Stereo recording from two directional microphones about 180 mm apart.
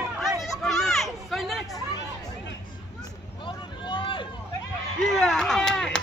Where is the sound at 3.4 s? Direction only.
25° left (ahead or behind).